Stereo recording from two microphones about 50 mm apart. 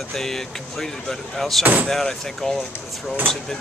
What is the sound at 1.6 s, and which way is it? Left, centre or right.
Speech, right.